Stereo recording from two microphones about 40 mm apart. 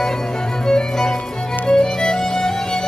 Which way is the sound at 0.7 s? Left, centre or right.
Centre.